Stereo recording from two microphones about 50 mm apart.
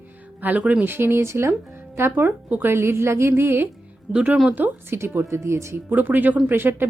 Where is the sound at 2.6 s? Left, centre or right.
Right.